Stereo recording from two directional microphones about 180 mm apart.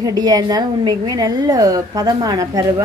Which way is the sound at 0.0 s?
20° right (ahead or behind).